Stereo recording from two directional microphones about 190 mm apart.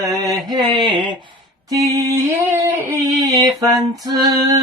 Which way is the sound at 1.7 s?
20° right (ahead or behind).